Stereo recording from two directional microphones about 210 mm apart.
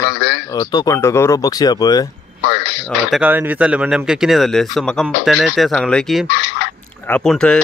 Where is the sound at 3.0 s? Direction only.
5° right (ahead or behind).